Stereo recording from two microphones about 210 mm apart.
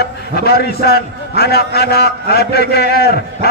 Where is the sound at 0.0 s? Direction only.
50° left (ahead or behind).